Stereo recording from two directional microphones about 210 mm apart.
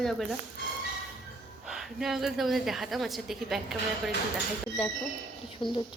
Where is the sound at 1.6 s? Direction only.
Centre (ahead or behind).